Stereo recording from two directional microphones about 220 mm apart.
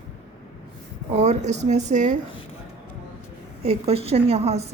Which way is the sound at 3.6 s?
25° right (ahead or behind).